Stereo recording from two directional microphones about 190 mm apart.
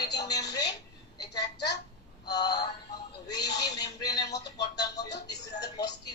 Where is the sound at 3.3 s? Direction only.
20° left (ahead or behind).